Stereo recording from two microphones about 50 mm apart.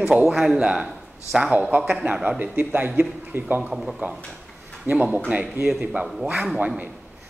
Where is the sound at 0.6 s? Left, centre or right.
Centre.